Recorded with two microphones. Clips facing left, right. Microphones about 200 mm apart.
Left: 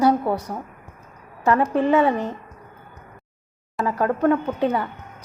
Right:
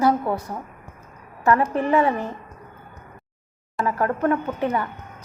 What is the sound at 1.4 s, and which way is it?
Speech, 15° left (ahead or behind).